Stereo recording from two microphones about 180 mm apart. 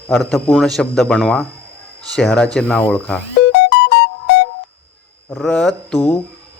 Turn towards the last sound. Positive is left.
turn(degrees=0)  # may be behind; listen again after turning